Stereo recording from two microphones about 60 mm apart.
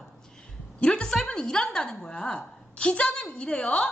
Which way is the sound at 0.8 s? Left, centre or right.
Centre.